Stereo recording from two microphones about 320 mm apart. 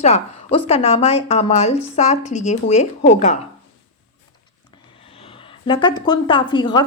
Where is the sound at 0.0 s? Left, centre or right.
Centre.